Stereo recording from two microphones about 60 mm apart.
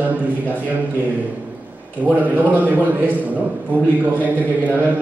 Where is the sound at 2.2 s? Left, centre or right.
Right.